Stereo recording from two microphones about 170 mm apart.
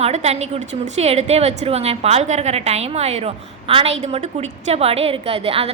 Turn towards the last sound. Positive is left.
turn(degrees=-35)  # may be behind; listen again after turning